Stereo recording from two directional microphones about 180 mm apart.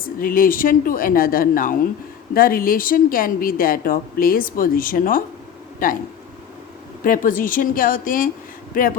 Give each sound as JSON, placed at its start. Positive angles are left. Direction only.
{"t": 0.2, "sound": "speech", "side_deg": 50}
{"t": 7.0, "sound": "speech", "side_deg": 50}